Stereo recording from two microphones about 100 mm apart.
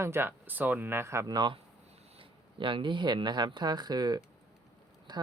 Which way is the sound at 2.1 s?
55° right (ahead or behind).